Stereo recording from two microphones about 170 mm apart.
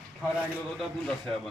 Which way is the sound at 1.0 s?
Centre (ahead or behind).